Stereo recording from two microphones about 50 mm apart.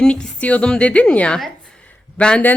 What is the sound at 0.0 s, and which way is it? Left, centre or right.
A man's voice, left.